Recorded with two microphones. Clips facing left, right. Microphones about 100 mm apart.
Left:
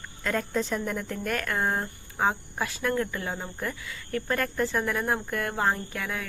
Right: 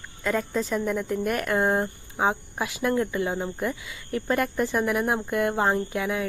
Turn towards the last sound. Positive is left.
turn(degrees=-20)  # may be behind; listen again after turning